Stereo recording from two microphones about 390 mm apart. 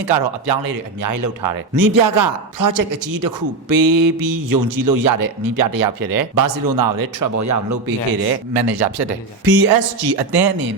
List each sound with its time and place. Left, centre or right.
0.0 s speech: right
8.3 s speech: right